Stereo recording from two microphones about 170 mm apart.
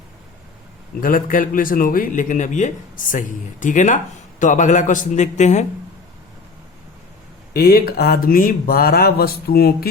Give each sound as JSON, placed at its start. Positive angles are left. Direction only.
{"t": 1.0, "sound": "a man's voice", "side_deg": 55}
{"t": 7.5, "sound": "speech", "side_deg": 60}